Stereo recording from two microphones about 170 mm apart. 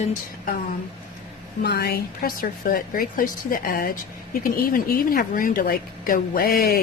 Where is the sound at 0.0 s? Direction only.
50° left (ahead or behind).